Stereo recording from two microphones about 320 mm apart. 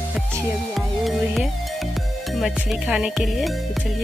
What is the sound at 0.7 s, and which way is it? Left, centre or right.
Music, centre.